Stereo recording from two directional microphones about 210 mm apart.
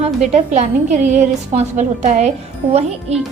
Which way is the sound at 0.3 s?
35° right (ahead or behind).